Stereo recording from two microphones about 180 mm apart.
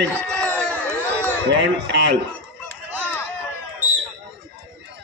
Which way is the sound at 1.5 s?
75° right (ahead or behind).